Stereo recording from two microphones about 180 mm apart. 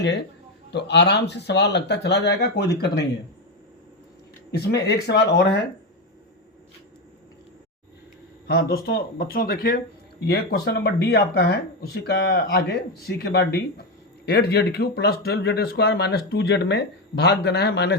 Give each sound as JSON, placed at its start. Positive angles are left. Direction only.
{"t": 0.7, "sound": "speech", "side_deg": 70}
{"t": 4.5, "sound": "speech", "side_deg": 65}
{"t": 8.4, "sound": "speech", "side_deg": 60}